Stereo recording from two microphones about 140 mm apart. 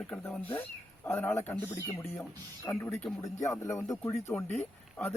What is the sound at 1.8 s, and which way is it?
Speech, 25° left (ahead or behind).